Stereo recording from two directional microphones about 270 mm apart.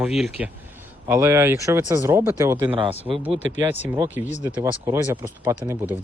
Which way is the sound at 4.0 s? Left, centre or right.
Centre.